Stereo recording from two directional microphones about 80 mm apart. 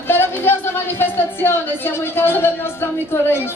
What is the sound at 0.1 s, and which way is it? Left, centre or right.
A woman's voice, left.